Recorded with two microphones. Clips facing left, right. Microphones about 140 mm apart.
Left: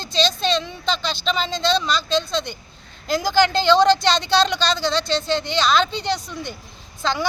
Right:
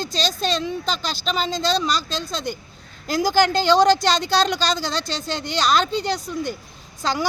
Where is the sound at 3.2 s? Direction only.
45° right (ahead or behind).